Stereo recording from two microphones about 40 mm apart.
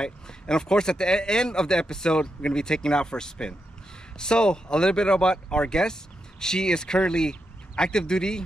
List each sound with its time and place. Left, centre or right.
0.0 s speech: centre